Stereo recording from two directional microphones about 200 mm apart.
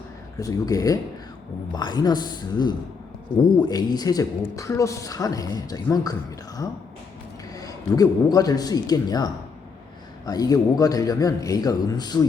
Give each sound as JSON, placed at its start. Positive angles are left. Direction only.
{"t": 0.3, "sound": "a woman's voice", "side_deg": 15}
{"t": 7.5, "sound": "a woman's voice", "side_deg": 15}